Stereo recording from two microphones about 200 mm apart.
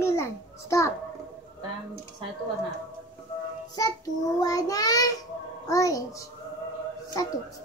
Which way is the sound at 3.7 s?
20° left (ahead or behind).